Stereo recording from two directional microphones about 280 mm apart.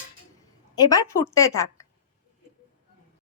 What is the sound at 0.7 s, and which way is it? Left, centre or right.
Speech, centre.